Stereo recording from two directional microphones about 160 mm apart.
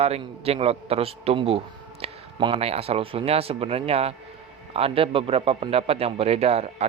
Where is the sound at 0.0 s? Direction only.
40° right (ahead or behind).